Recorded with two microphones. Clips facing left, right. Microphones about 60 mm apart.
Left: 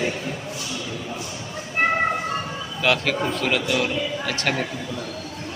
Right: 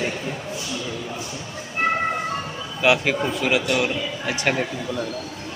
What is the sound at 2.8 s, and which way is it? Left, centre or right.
A man's voice, centre.